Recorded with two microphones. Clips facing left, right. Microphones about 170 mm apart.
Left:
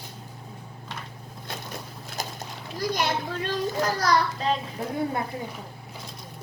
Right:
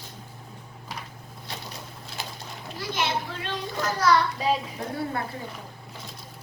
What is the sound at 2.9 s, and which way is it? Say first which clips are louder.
A child's voice: even; 40° left (ahead or behind).